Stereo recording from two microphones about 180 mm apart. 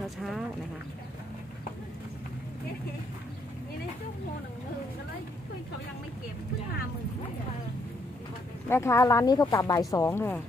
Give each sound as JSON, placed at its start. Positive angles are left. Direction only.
{"t": 0.0, "sound": "speech", "side_deg": 0}
{"t": 8.6, "sound": "speech", "side_deg": 15}